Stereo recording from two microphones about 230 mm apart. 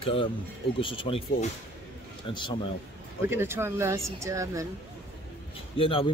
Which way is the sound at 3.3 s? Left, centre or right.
Centre.